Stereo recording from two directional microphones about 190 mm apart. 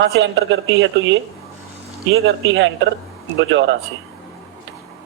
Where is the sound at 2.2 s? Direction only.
90° right.